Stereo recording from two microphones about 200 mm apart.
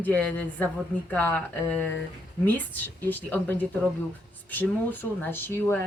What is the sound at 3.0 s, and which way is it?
Speech, 10° left (ahead or behind).